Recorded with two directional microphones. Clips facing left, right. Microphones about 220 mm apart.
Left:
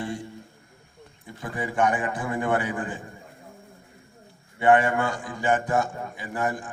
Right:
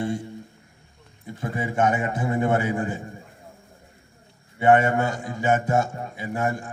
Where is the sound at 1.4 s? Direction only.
25° right (ahead or behind).